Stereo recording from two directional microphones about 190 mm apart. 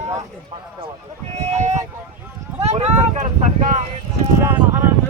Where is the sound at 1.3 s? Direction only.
35° right (ahead or behind).